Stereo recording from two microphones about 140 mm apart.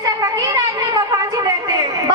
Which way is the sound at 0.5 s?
30° right (ahead or behind).